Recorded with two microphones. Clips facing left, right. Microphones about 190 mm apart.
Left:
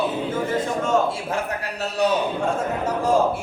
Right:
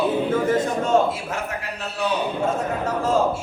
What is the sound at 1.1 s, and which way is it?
A man's voice, 35° left (ahead or behind).